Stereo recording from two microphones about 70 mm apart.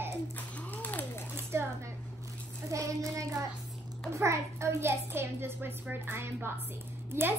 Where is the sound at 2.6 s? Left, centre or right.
Right.